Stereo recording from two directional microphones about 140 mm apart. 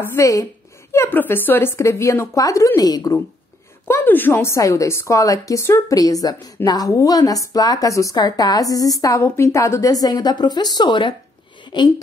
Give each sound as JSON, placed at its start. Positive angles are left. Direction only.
{"t": 0.0, "sound": "a woman's voice", "side_deg": 20}
{"t": 3.8, "sound": "a woman's voice", "side_deg": 15}